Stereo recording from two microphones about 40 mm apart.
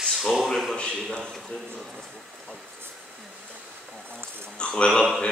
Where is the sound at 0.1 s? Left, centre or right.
Centre.